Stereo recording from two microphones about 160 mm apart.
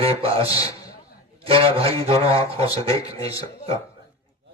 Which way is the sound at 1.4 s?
35° right (ahead or behind).